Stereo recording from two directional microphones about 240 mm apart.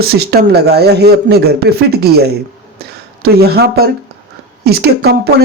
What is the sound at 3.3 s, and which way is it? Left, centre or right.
Speech, right.